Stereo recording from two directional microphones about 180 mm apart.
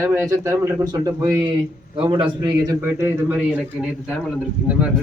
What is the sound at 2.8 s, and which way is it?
A man's voice, 15° right (ahead or behind).